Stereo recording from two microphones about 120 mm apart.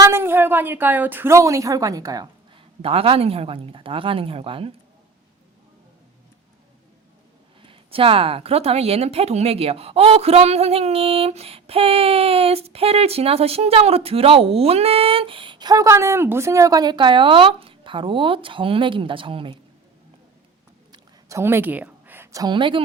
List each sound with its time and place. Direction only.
0.0 s a woman's voice: 20° right (ahead or behind)
2.8 s speech: 55° right (ahead or behind)
7.6 s speech: 50° right (ahead or behind)
21.2 s a sound: 20° right (ahead or behind)
22.5 s speech: 40° right (ahead or behind)